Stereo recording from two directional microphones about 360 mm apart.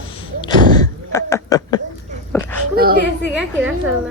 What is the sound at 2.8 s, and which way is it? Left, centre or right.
Speech, right.